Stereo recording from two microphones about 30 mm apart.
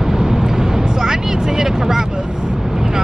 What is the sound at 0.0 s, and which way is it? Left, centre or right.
Vehicle, centre.